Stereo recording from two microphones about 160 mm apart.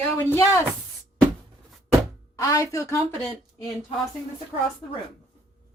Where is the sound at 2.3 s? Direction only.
20° left (ahead or behind).